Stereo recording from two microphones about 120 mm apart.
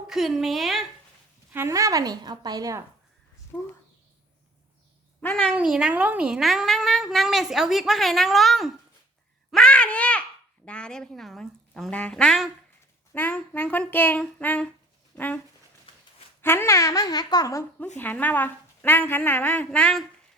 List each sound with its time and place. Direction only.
0.1 s speech: centre (ahead or behind)
1.5 s a woman's voice: 25° right (ahead or behind)
5.2 s a child's voice: 10° left (ahead or behind)
5.5 s speech: 5° right (ahead or behind)
9.5 s a sound: 5° left (ahead or behind)
10.7 s a woman's voice: 10° left (ahead or behind)
16.4 s speech: 20° left (ahead or behind)
17.9 s a woman's voice: 15° left (ahead or behind)